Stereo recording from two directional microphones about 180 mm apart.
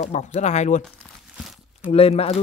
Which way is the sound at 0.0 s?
40° left (ahead or behind).